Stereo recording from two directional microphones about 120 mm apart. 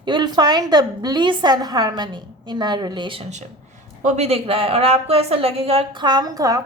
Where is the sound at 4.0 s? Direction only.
70° right (ahead or behind); by 6.0 s 50° right (ahead or behind).